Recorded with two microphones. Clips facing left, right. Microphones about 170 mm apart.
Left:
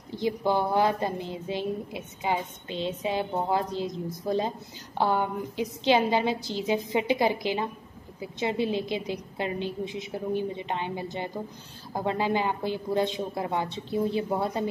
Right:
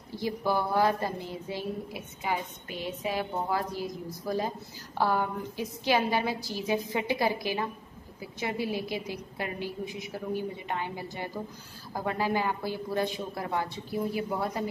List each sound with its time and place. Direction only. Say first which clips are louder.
0.1 s a woman's voice: left 3 dB; 20° left (ahead or behind)